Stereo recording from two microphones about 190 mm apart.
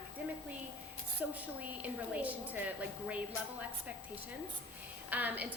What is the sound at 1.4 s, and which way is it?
A woman's voice, 5° right (ahead or behind).